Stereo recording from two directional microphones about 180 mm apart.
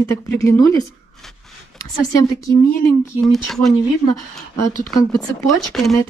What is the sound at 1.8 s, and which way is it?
Speech, 20° left (ahead or behind).